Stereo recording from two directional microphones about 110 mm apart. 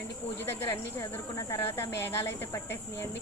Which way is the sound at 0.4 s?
25° left (ahead or behind).